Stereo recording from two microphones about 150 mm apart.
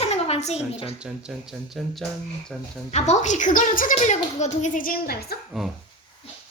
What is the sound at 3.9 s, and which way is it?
A woman's voice, 50° left (ahead or behind).